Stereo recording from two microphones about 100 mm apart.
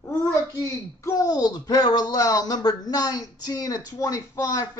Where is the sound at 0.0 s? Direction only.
25° left (ahead or behind).